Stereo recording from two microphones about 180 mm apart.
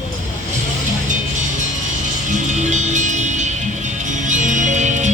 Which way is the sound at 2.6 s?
40° right (ahead or behind).